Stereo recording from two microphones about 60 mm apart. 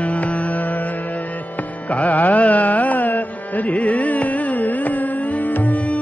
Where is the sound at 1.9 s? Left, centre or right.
Left.